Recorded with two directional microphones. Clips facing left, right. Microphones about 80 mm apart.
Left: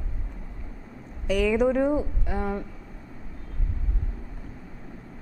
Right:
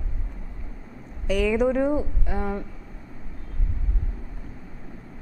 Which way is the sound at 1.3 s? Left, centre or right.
Centre.